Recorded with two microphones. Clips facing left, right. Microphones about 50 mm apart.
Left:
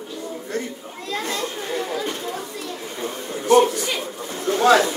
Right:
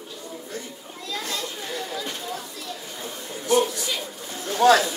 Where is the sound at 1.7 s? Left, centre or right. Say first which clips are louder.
Left 6 dB; left.